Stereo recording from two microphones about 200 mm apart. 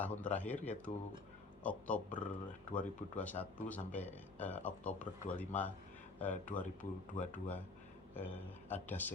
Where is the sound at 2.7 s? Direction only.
10° left (ahead or behind).